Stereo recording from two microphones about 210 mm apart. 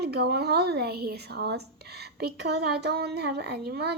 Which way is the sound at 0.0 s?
50° right (ahead or behind).